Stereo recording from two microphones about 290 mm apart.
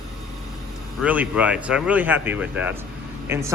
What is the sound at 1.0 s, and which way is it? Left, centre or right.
Speech, centre.